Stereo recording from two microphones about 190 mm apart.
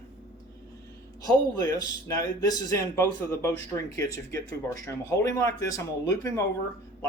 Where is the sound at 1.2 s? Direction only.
20° left (ahead or behind).